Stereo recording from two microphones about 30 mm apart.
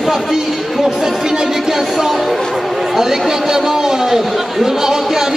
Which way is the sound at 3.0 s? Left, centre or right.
Centre.